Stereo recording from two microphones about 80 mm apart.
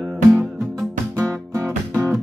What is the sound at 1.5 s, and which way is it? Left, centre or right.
Music, right.